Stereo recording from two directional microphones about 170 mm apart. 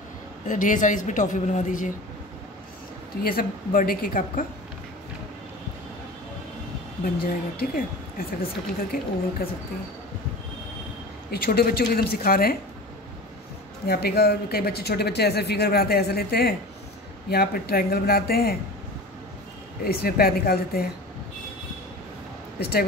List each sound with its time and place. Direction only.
0.5 s a woman's voice: 50° left (ahead or behind)
3.2 s speech: 60° left (ahead or behind)
7.2 s speech: 60° left (ahead or behind)
11.2 s speech: 65° left (ahead or behind)
13.8 s speech: 65° left (ahead or behind)
19.8 s speech: 65° left (ahead or behind)
22.6 s speech: 70° left (ahead or behind)